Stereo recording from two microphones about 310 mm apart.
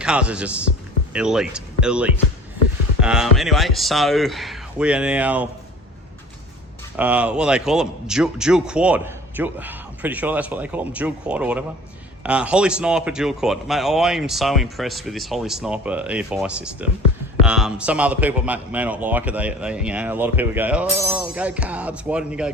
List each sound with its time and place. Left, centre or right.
0.0 s speech: centre
6.9 s speech: centre